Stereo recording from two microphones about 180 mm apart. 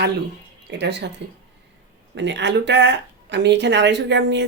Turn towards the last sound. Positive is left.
turn(degrees=-75)  # may be behind; listen again after turning